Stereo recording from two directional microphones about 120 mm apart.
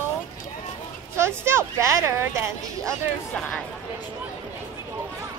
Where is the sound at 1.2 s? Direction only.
20° right (ahead or behind).